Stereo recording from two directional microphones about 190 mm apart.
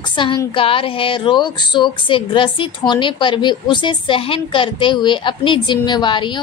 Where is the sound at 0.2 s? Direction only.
25° left (ahead or behind).